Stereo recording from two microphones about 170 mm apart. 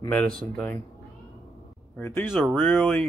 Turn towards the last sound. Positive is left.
turn(degrees=5)  # may be behind; listen again after turning